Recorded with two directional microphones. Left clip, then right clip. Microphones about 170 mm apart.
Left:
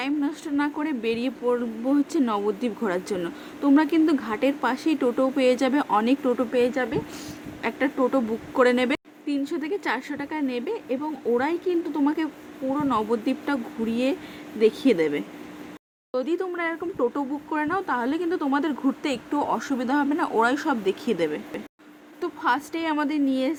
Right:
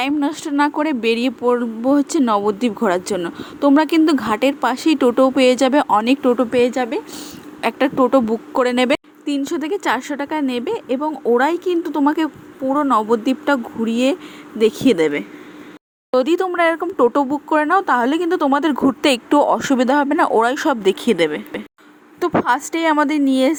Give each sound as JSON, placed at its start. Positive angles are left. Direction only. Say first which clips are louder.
{"t": 0.0, "sound": "speech", "louder": "right 8 dB", "side_deg": -40}